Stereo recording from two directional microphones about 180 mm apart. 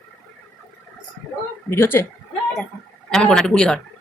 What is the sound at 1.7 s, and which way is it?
Speech, 15° left (ahead or behind).